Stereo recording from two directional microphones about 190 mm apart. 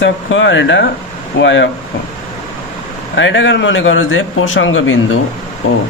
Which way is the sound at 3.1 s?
75° left (ahead or behind).